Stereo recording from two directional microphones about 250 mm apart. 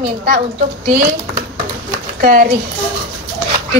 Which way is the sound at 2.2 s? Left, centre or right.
Right.